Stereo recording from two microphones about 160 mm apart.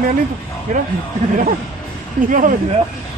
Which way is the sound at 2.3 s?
55° right (ahead or behind).